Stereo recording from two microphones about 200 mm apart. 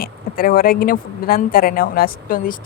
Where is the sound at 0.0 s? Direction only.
45° left (ahead or behind).